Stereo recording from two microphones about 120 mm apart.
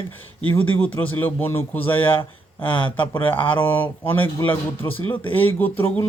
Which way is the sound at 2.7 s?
45° left (ahead or behind).